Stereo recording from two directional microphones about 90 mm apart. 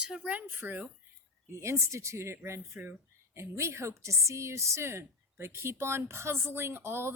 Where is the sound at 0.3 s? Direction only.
20° right (ahead or behind).